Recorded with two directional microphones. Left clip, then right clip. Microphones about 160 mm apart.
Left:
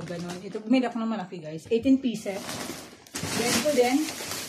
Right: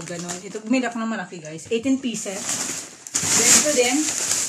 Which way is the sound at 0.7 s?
40° right (ahead or behind).